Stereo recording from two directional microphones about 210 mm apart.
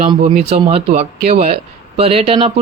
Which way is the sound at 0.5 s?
30° right (ahead or behind).